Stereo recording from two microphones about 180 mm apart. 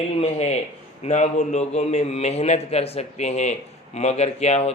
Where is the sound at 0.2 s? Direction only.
35° left (ahead or behind).